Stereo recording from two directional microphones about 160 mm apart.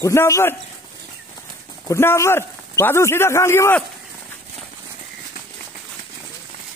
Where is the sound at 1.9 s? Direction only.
15° left (ahead or behind).